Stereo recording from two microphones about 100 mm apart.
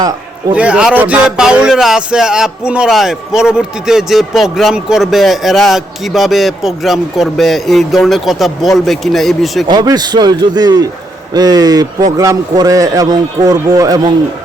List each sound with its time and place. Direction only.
0.5 s speech: 10° right (ahead or behind)
9.6 s a man's voice: 45° right (ahead or behind)